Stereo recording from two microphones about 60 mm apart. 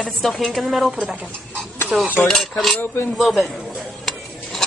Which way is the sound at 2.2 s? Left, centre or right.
Centre.